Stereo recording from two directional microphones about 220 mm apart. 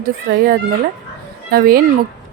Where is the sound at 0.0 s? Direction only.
45° right (ahead or behind).